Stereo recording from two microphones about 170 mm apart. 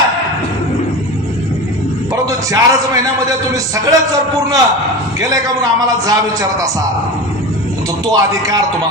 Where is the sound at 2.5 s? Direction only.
20° right (ahead or behind).